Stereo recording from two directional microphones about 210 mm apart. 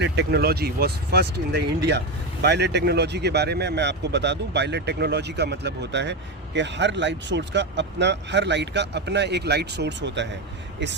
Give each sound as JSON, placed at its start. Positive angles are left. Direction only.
{"t": 0.0, "sound": "speech", "side_deg": -50}